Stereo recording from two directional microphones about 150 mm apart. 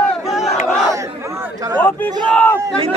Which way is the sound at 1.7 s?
10° left (ahead or behind).